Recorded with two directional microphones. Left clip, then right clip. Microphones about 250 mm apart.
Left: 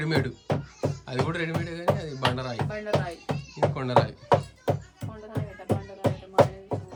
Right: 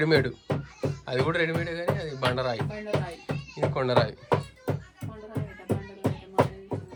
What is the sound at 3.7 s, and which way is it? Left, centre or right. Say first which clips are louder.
Speech: right 1 dB; centre.